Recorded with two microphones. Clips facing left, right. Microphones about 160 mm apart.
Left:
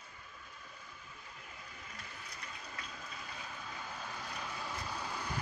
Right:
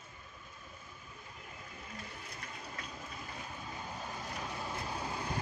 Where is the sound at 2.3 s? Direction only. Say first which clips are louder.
Right 1 dB; 25° right (ahead or behind).